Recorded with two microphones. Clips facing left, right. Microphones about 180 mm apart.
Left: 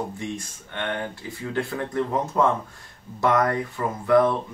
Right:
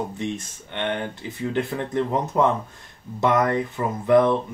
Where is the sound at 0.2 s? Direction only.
20° right (ahead or behind).